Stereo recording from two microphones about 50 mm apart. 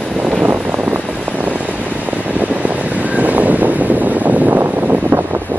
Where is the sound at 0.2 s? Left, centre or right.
Right.